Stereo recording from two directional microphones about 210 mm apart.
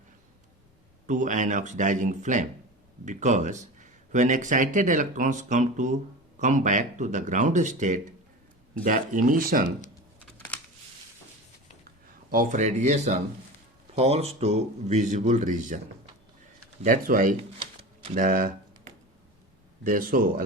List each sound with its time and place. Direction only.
1.0 s speech: 35° right (ahead or behind)
12.3 s speech: 40° right (ahead or behind)
16.8 s speech: 40° right (ahead or behind)
18.0 s typing: 35° right (ahead or behind)
19.8 s speech: 40° right (ahead or behind)